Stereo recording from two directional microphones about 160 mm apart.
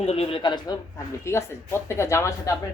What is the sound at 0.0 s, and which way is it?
Speech, 40° left (ahead or behind).